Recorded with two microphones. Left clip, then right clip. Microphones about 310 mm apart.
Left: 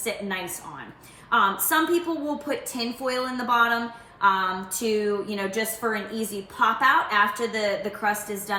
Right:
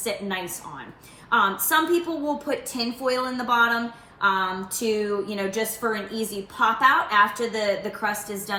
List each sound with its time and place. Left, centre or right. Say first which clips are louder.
0.0 s a woman's voice: right 1 dB; centre